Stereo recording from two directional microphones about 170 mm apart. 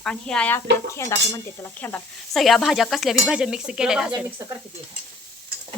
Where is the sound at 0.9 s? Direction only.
15° left (ahead or behind).